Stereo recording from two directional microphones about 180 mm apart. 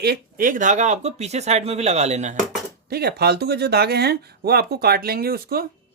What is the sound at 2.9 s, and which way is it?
Speech, 60° right (ahead or behind).